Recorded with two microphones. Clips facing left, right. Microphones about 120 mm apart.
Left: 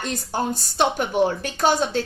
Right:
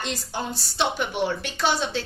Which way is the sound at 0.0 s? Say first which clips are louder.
Left 5 dB; 45° left (ahead or behind).